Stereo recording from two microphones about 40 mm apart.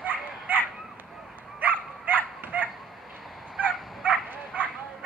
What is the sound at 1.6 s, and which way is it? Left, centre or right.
Dog, right.